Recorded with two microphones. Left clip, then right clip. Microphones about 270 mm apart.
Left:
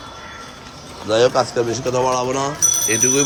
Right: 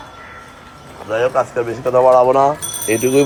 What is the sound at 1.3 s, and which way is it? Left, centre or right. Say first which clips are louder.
Speech: right 1 dB; centre.